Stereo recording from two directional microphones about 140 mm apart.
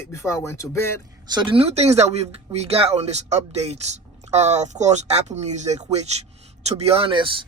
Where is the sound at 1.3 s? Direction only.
35° right (ahead or behind).